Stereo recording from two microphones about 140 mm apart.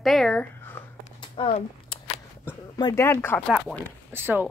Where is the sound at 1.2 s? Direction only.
35° left (ahead or behind).